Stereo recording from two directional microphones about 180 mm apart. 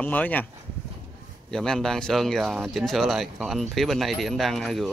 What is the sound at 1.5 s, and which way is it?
Speech, 5° left (ahead or behind).